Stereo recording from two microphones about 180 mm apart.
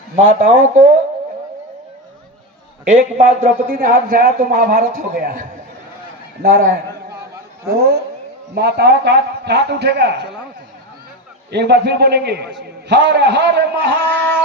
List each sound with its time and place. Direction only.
0.2 s a man's voice: 45° right (ahead or behind)
2.9 s a man's voice: 45° right (ahead or behind)
7.7 s a sound: 60° right (ahead or behind)
8.5 s a man's voice: 65° right (ahead or behind)
11.5 s a man's voice: 70° right (ahead or behind)